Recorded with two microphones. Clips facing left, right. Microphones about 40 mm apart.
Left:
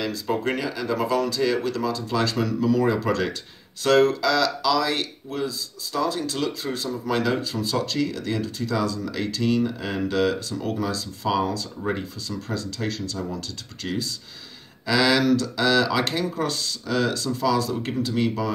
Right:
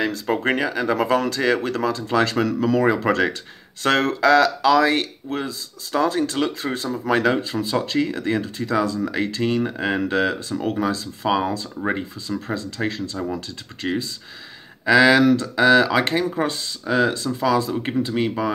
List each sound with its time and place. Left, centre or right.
0.0 s speech: right
13.8 s speech: right
14.9 s speech: right